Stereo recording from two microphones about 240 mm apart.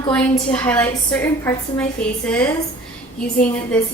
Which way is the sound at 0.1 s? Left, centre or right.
Centre.